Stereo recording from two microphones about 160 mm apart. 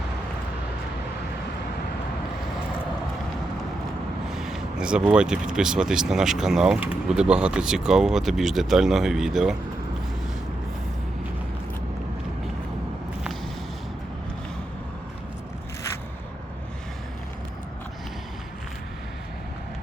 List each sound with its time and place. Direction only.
4.3 s speech: centre (ahead or behind)